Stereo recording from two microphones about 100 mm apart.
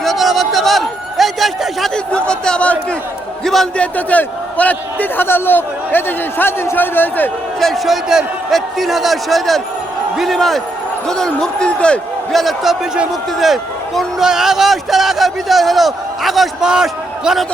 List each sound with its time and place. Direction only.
0.0 s a sound: centre (ahead or behind)
3.4 s a man's voice: 5° left (ahead or behind)
3.9 s a man's voice: 15° left (ahead or behind)
7.6 s a man's voice: centre (ahead or behind)